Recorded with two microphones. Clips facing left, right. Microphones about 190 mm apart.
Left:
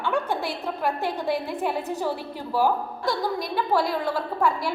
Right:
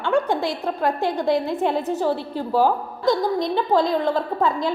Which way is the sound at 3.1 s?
20° right (ahead or behind).